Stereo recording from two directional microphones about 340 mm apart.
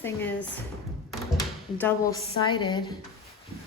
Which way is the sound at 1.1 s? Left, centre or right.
Centre.